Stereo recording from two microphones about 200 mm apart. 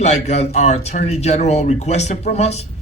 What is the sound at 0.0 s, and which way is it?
A man's voice, 35° left (ahead or behind).